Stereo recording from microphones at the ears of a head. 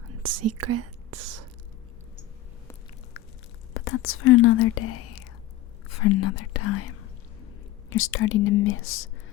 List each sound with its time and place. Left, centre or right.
0.1 s speech: right
3.8 s speech: left